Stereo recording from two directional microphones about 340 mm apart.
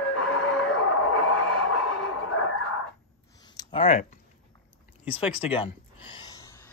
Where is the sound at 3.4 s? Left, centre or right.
Centre.